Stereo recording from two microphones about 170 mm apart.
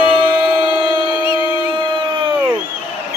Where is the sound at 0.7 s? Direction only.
25° right (ahead or behind).